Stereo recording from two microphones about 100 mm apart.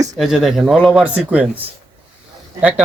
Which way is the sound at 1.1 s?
15° right (ahead or behind).